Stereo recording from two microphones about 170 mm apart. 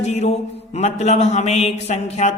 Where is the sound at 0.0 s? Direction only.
40° left (ahead or behind).